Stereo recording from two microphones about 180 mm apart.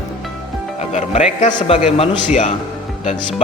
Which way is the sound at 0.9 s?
40° left (ahead or behind).